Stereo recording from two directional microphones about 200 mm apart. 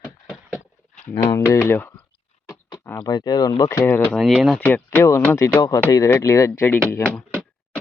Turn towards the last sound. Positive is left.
turn(degrees=5)  # may be behind; listen again after turning